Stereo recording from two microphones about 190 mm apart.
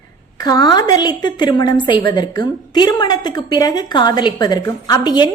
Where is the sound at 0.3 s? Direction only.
20° left (ahead or behind).